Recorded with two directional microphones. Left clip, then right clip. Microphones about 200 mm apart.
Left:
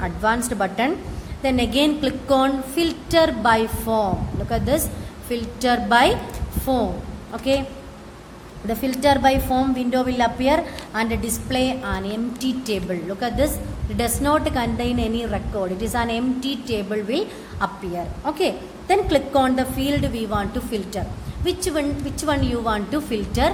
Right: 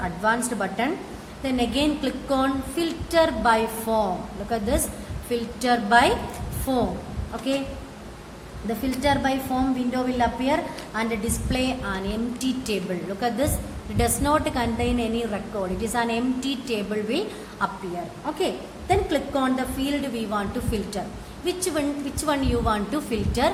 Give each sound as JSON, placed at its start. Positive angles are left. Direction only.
{"t": 0.0, "sound": "a woman's voice", "side_deg": 25}
{"t": 8.6, "sound": "a woman's voice", "side_deg": 30}